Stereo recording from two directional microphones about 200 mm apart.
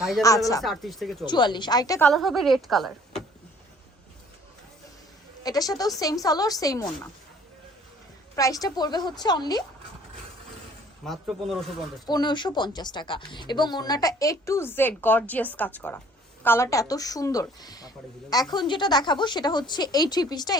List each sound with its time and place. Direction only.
0.2 s speech: 15° left (ahead or behind)
0.6 s speech: centre (ahead or behind)
1.2 s speech: 20° left (ahead or behind)
2.0 s speech: centre (ahead or behind)
5.4 s speech: 20° left (ahead or behind)
8.4 s speech: 15° left (ahead or behind)
11.0 s speech: centre (ahead or behind)
12.0 s speech: 20° left (ahead or behind)